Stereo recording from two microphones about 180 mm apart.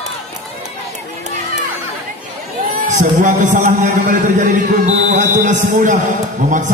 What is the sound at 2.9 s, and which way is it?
A man's voice, 45° right (ahead or behind).